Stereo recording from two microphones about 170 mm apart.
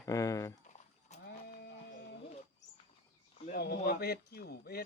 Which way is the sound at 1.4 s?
70° left (ahead or behind).